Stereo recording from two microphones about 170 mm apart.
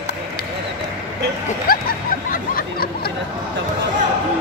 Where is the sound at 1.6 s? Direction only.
60° left (ahead or behind).